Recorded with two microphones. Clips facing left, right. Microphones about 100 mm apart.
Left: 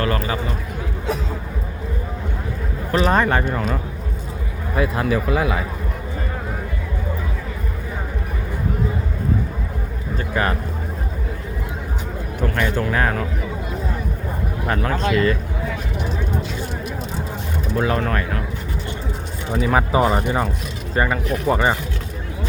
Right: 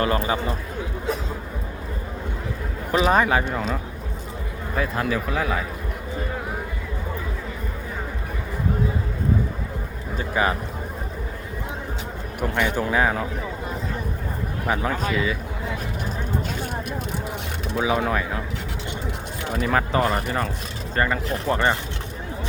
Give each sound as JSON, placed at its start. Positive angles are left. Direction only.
{"t": 0.0, "sound": "speech", "side_deg": -20}
{"t": 2.9, "sound": "speech", "side_deg": -5}
{"t": 10.2, "sound": "a sound", "side_deg": -10}
{"t": 12.4, "sound": "speech", "side_deg": -15}
{"t": 14.8, "sound": "speech", "side_deg": -5}
{"t": 17.7, "sound": "speech", "side_deg": -10}
{"t": 19.5, "sound": "speech", "side_deg": 5}